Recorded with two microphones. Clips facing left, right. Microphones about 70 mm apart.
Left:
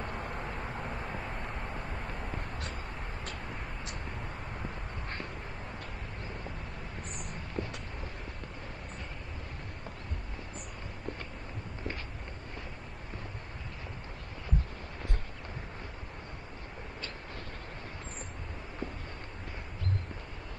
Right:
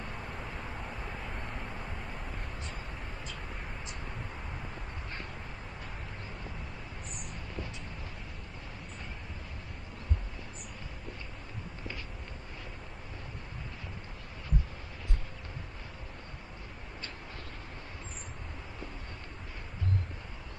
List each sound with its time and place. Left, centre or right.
0.0 s vehicle: centre
7.6 s vehicle: left